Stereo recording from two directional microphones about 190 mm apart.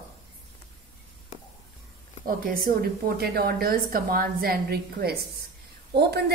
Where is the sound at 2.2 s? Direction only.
50° right (ahead or behind).